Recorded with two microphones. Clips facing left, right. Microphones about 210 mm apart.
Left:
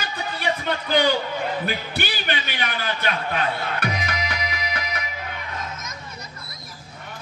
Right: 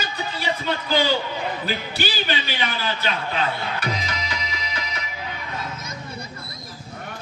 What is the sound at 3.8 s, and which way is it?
Music, 60° left (ahead or behind).